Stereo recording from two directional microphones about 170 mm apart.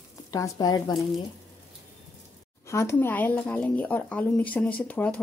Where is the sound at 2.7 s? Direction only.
15° left (ahead or behind).